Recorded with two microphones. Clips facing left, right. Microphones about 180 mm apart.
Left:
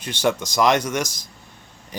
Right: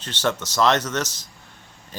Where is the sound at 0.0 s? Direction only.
10° left (ahead or behind).